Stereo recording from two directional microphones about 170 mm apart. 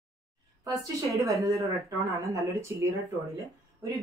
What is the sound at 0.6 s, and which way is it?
Speech, 20° right (ahead or behind).